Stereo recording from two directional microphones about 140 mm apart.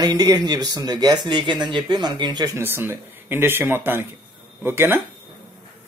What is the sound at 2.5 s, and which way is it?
A man's voice, 15° right (ahead or behind).